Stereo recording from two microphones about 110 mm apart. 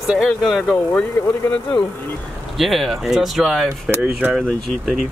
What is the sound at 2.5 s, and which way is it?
Speech, centre (ahead or behind).